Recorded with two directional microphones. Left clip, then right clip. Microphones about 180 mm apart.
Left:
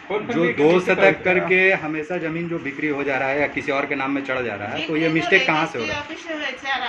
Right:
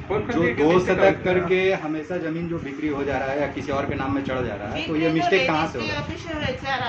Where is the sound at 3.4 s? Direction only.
10° left (ahead or behind).